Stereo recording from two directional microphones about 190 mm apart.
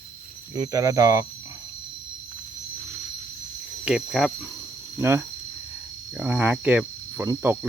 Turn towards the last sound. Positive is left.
turn(degrees=-10)  # may be behind; listen again after turning